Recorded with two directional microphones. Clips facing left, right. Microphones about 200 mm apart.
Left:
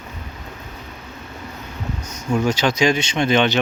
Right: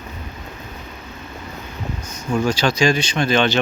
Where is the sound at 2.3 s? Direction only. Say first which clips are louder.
Even; 20° left (ahead or behind).